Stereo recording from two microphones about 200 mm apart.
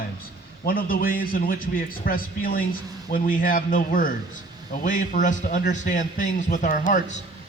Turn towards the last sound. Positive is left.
turn(degrees=40)  # may be behind; listen again after turning